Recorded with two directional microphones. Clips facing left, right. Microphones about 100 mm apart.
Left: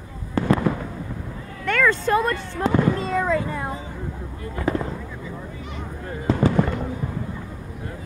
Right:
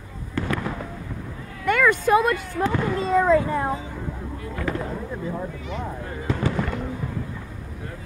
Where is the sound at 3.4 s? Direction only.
25° right (ahead or behind).